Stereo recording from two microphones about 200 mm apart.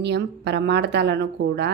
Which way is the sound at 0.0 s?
55° right (ahead or behind).